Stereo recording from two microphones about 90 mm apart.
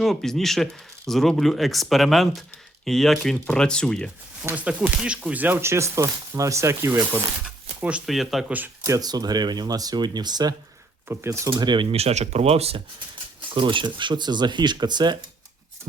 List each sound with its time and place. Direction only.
0.0 s speech: 5° left (ahead or behind)
4.5 s speech: 15° right (ahead or behind)
7.8 s speech: 10° right (ahead or behind)
8.0 s speech: centre (ahead or behind)
8.4 s speech: 20° right (ahead or behind)
9.0 s speech: 45° right (ahead or behind)
11.1 s speech: 30° right (ahead or behind)
11.5 s speech: 65° right (ahead or behind)
12.5 s speech: 90° right
13.5 s speech: 65° right (ahead or behind)